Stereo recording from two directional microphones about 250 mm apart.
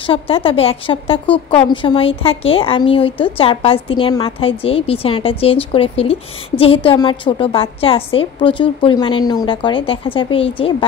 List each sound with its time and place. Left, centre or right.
0.0 s a woman's voice: left